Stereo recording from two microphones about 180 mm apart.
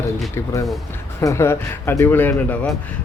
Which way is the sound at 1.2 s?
15° left (ahead or behind).